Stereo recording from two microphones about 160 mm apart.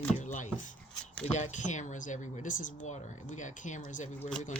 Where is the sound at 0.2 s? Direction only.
50° left (ahead or behind).